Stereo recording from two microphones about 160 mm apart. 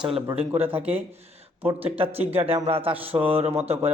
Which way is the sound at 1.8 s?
40° right (ahead or behind).